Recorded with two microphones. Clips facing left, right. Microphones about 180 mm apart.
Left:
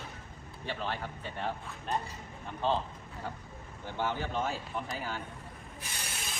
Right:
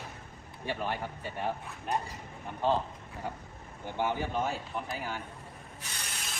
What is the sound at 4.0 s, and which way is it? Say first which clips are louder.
Speech: right 2 dB; 15° right (ahead or behind).